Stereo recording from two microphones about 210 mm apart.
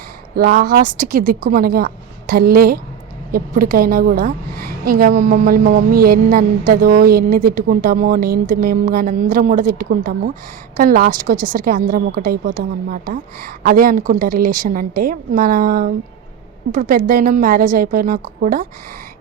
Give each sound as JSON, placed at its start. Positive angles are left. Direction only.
{"t": 0.3, "sound": "a woman's voice", "side_deg": -40}